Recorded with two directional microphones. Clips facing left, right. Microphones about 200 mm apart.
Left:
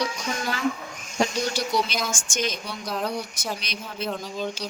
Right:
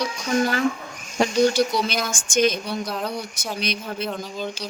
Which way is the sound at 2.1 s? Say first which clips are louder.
Right 8 dB; 55° right (ahead or behind).